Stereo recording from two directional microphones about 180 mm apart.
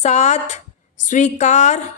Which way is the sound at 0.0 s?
40° left (ahead or behind).